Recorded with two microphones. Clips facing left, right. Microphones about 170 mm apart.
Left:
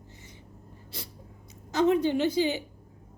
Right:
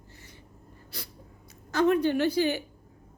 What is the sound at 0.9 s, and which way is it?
Dog, 25° left (ahead or behind).